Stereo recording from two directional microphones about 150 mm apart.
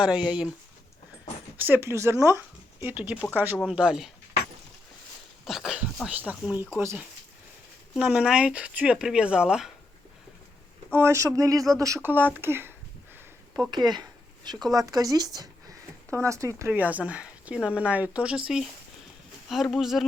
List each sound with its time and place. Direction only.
0.0 s speech: 5° right (ahead or behind)
1.5 s speech: 15° right (ahead or behind)
5.5 s speech: centre (ahead or behind)
10.9 s speech: 20° right (ahead or behind)
13.7 s a sound: 30° right (ahead or behind)
14.7 s speech: 25° right (ahead or behind); by 20.1 s centre (ahead or behind)